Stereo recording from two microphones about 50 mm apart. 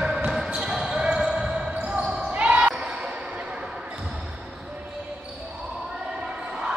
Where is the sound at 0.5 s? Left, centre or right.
Centre.